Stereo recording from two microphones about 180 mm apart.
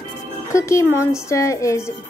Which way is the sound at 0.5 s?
15° left (ahead or behind).